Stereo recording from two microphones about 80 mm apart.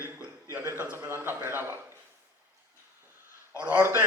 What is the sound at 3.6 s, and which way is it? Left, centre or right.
Speech, right.